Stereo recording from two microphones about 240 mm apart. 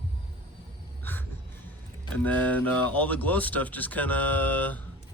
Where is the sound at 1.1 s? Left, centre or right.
Centre.